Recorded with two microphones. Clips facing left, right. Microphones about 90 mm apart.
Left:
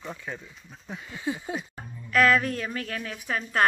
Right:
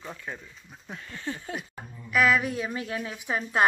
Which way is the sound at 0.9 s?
10° left (ahead or behind).